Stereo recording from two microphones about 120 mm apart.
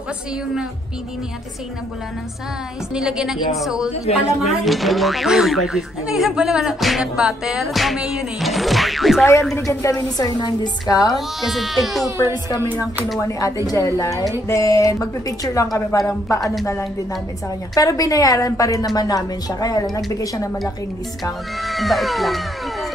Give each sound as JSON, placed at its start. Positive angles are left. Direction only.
{"t": 2.9, "sound": "speech", "side_deg": -5}
{"t": 9.7, "sound": "a woman's voice", "side_deg": 25}
{"t": 11.1, "sound": "speech", "side_deg": 0}
{"t": 13.7, "sound": "a woman's voice", "side_deg": 30}
{"t": 17.7, "sound": "a woman's voice", "side_deg": 30}
{"t": 21.6, "sound": "speech", "side_deg": 0}